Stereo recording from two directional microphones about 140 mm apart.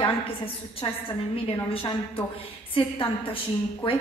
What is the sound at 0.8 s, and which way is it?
A woman's voice, 40° left (ahead or behind).